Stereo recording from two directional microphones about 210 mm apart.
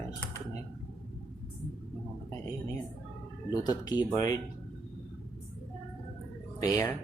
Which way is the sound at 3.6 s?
20° left (ahead or behind).